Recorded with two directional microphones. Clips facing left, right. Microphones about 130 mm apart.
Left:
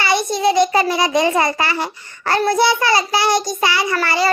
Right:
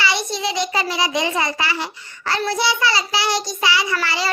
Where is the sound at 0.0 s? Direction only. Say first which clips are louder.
Left 6 dB; 50° left (ahead or behind).